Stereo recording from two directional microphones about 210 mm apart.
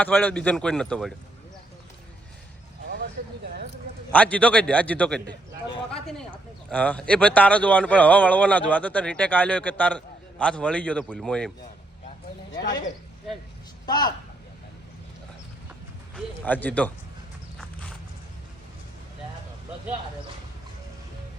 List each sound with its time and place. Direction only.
0.0 s a man's voice: 5° left (ahead or behind)
4.1 s speech: 5° left (ahead or behind)
13.8 s speech: 20° left (ahead or behind)
16.1 s speech: 5° left (ahead or behind)
17.6 s walk: 5° left (ahead or behind)